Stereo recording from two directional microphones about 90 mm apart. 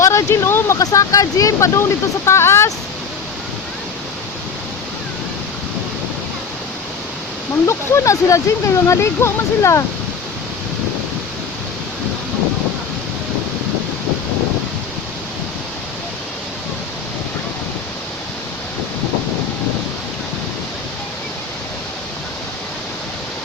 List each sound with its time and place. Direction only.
0.0 s a sound: 35° left (ahead or behind)
0.8 s speech: 40° left (ahead or behind)
7.7 s speech: 35° left (ahead or behind)